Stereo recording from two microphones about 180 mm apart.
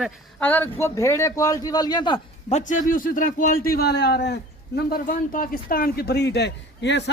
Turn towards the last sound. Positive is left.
turn(degrees=75)  # may be behind; listen again after turning